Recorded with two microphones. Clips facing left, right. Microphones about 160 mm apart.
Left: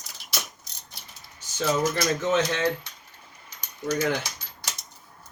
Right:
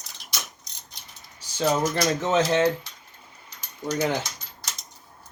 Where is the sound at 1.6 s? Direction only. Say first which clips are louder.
Right 2 dB; 30° right (ahead or behind).